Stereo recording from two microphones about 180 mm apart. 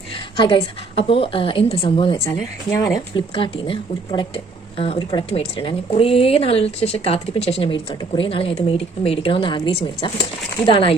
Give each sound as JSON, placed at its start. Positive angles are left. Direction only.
{"t": 0.3, "sound": "a woman's voice", "side_deg": 30}
{"t": 2.7, "sound": "speech", "side_deg": 15}
{"t": 3.2, "sound": "a woman's voice", "side_deg": 30}